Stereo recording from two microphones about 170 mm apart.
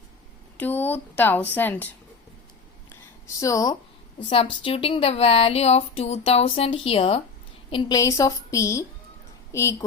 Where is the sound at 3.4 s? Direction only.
20° left (ahead or behind).